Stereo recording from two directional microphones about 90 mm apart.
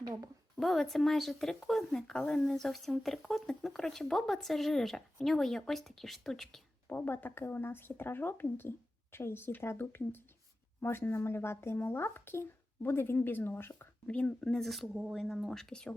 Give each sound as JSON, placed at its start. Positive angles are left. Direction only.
{"t": 0.6, "sound": "speech", "side_deg": 0}
{"t": 6.8, "sound": "speech", "side_deg": 20}
{"t": 14.1, "sound": "speech", "side_deg": 15}